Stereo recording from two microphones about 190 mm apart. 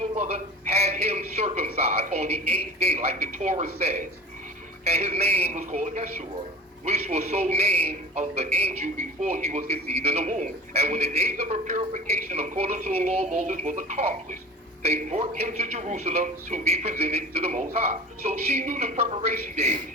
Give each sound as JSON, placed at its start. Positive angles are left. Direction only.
{"t": 0.0, "sound": "a man's voice", "side_deg": -35}